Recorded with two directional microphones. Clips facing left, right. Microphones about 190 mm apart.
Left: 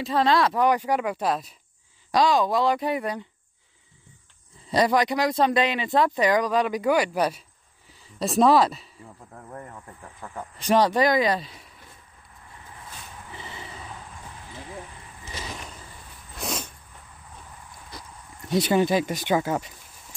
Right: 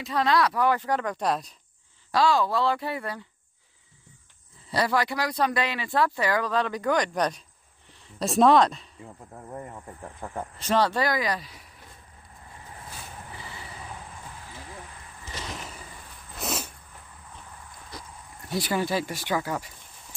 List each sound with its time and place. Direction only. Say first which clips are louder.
0.0 s speech: left 2 dB; 30° left (ahead or behind); by 1.5 s 5° left (ahead or behind)
2.1 s speech: left 2 dB; 15° left (ahead or behind)
4.6 s speech: left 4 dB; 20° left (ahead or behind); by 8.8 s 5° left (ahead or behind)
9.5 s speech: right 2 dB; 10° right (ahead or behind)
10.6 s speech: left 4 dB; 15° left (ahead or behind)
13.4 s a sound: left 2 dB; 20° left (ahead or behind)
16.3 s a sound: even; 5° right (ahead or behind)
18.5 s speech: left 6 dB; 20° left (ahead or behind)